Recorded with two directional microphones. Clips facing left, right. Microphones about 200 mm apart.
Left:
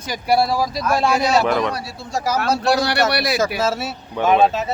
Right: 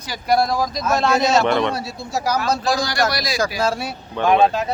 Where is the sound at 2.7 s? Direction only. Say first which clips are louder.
Left 3 dB; 70° left (ahead or behind).